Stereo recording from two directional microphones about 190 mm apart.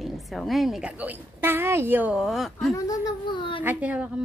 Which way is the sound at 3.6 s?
10° right (ahead or behind).